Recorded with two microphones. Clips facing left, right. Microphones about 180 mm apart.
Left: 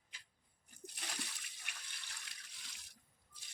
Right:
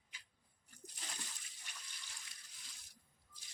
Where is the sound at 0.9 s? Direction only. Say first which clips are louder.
Left 4 dB; 75° left (ahead or behind).